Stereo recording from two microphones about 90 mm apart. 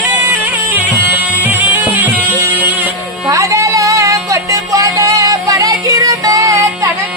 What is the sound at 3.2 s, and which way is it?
Music, 35° right (ahead or behind).